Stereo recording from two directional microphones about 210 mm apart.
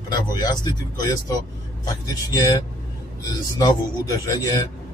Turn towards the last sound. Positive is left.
turn(degrees=20)  # may be behind; listen again after turning